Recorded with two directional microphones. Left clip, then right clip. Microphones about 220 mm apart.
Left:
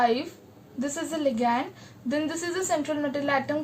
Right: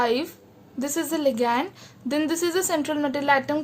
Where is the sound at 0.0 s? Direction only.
50° right (ahead or behind).